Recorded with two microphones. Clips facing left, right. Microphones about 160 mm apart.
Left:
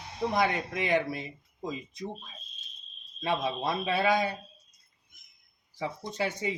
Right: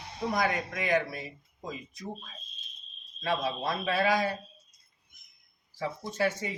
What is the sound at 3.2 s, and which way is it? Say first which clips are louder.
A man's voice: left 1 dB; 20° left (ahead or behind).